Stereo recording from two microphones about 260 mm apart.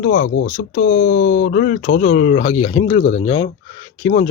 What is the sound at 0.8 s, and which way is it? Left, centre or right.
Speech, left.